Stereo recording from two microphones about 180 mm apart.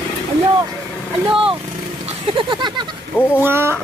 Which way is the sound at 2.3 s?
25° right (ahead or behind).